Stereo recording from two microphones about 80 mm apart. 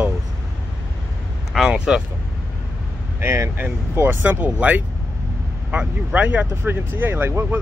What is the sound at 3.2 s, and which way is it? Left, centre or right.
Speech, right.